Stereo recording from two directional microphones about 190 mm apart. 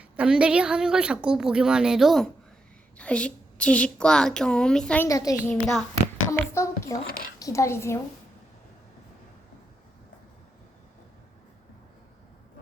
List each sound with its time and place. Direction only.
0.0 s a woman's voice: 5° right (ahead or behind)
5.0 s a child's voice: 20° left (ahead or behind)
5.5 s a woman's voice: centre (ahead or behind)
6.5 s a child's voice: 15° left (ahead or behind)